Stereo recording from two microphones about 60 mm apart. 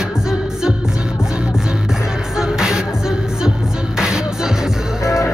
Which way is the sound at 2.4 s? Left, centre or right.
Centre.